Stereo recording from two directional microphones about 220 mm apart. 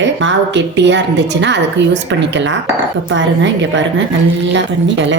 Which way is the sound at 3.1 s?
55° right (ahead or behind).